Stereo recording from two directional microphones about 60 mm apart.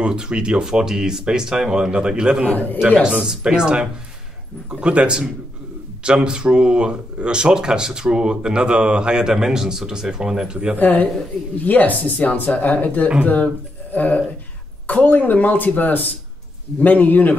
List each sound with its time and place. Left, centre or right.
0.0 s speech: centre
2.4 s speech: left
3.0 s speech: centre
10.8 s speech: left